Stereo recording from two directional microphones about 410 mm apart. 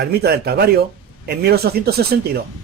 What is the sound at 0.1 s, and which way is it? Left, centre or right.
A man's voice, right.